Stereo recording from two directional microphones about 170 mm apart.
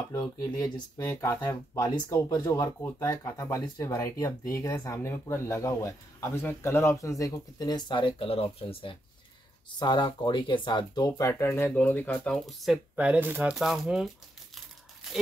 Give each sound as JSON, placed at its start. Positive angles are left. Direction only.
{"t": 0.1, "sound": "speech", "side_deg": 20}
{"t": 12.9, "sound": "speech", "side_deg": -10}